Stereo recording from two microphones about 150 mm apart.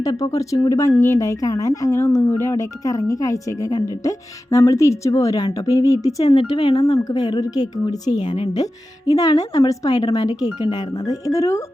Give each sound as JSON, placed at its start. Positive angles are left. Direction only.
{"t": 0.0, "sound": "speech", "side_deg": 25}
{"t": 6.3, "sound": "speech", "side_deg": 35}